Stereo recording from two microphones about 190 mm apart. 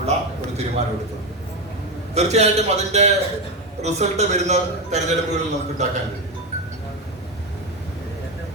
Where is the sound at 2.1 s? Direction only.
35° right (ahead or behind).